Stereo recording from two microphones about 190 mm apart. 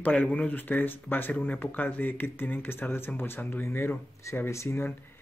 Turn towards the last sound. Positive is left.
turn(degrees=15)  # may be behind; listen again after turning